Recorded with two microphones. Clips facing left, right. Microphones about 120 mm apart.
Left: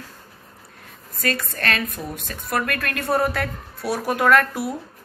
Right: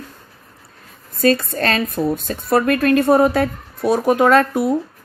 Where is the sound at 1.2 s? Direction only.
25° right (ahead or behind).